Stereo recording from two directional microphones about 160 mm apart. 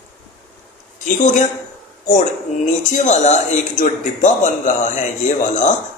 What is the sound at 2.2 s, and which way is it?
Speech, 50° left (ahead or behind).